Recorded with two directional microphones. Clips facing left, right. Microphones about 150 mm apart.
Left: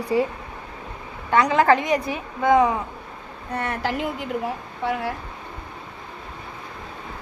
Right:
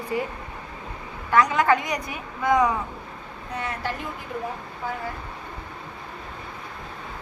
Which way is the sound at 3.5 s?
65° left (ahead or behind).